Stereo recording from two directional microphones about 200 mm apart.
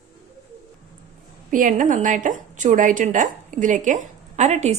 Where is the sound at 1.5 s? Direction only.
40° right (ahead or behind).